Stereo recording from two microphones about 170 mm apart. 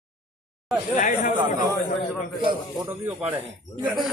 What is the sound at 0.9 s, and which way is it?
Speech, 50° left (ahead or behind).